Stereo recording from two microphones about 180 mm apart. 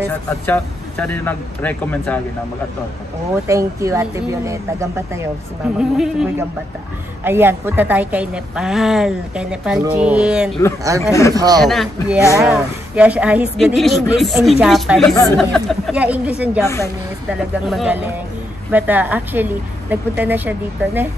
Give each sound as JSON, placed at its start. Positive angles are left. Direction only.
{"t": 0.3, "sound": "speech", "side_deg": 10}
{"t": 3.4, "sound": "speech", "side_deg": -15}
{"t": 5.8, "sound": "a woman's voice", "side_deg": -5}
{"t": 7.2, "sound": "a woman's voice", "side_deg": -10}
{"t": 11.0, "sound": "speech", "side_deg": 15}
{"t": 11.3, "sound": "a man's voice", "side_deg": -20}
{"t": 11.6, "sound": "a woman's voice", "side_deg": 0}
{"t": 16.6, "sound": "speech", "side_deg": 15}
{"t": 17.3, "sound": "a woman's voice", "side_deg": -5}